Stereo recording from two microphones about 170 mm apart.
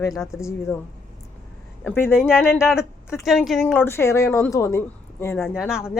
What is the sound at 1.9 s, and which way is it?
Speech, 15° left (ahead or behind).